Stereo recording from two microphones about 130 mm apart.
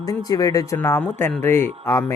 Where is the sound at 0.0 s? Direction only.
30° left (ahead or behind).